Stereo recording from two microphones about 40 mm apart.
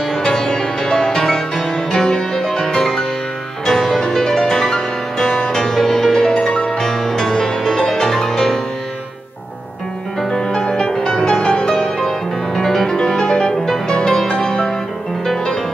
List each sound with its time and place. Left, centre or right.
0.2 s music: centre
10.3 s music: centre